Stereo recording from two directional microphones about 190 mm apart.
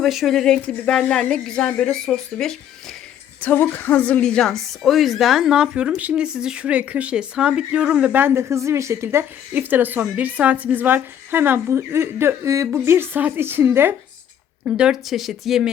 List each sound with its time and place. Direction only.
0.0 s a woman's voice: centre (ahead or behind)